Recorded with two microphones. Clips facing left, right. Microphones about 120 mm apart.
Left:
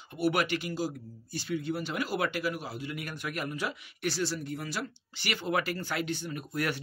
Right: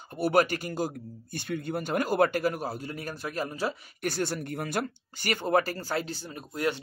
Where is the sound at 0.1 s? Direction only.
40° right (ahead or behind).